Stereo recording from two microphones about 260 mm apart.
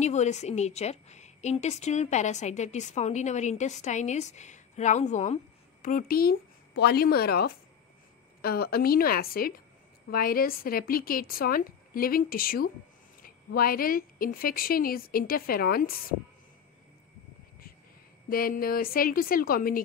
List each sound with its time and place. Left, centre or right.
0.0 s a woman's voice: left
18.3 s a woman's voice: left